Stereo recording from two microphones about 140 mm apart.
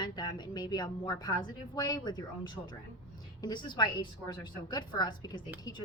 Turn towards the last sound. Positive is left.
turn(degrees=30)  # may be behind; listen again after turning